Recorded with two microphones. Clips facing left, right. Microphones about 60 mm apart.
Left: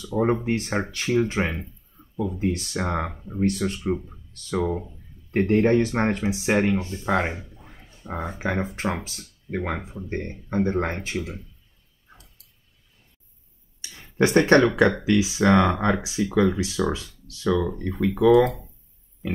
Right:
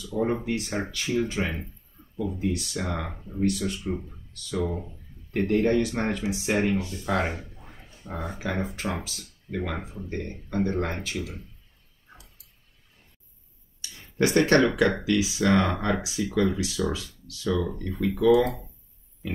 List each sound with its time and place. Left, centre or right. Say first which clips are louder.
0.0 s speech: left 4 dB; left
13.7 s a sound: left 3 dB; left
15.0 s speech: left 4 dB; left